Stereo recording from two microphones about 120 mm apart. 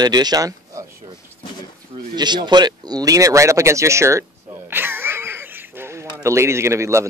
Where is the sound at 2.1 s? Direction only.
40° right (ahead or behind).